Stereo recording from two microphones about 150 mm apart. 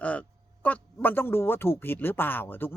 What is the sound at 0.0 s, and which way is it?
A man's voice, 10° left (ahead or behind).